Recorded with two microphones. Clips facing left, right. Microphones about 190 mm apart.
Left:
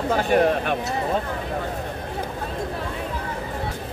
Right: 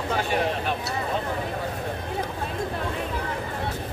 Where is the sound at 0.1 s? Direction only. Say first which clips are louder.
Left 7 dB; 50° left (ahead or behind).